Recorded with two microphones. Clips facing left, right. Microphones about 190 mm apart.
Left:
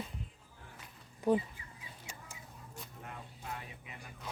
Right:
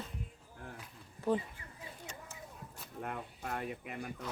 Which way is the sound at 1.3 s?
15° left (ahead or behind).